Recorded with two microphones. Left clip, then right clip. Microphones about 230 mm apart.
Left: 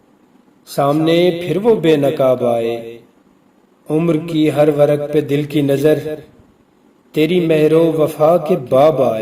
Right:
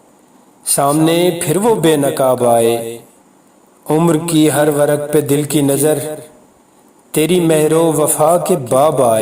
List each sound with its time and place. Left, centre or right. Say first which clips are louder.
0.6 s a man's voice: right 2 dB; right